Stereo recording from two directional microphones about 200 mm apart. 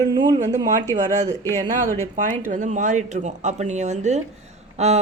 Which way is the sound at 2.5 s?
40° right (ahead or behind).